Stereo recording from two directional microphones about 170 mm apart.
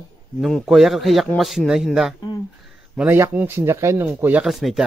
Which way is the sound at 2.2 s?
25° left (ahead or behind).